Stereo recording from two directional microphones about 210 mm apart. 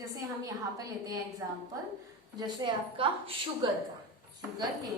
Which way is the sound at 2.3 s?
20° right (ahead or behind).